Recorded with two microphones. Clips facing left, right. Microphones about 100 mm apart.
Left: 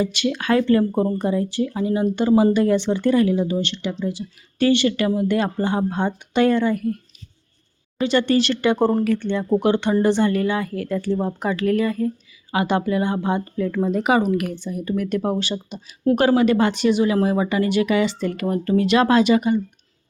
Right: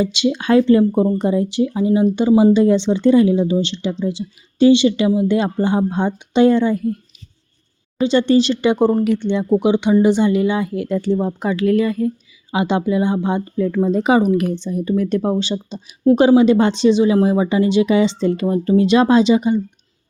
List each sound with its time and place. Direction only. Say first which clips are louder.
0.0 s speech: right 4 dB; 20° right (ahead or behind)
8.0 s speech: right 4 dB; 20° right (ahead or behind)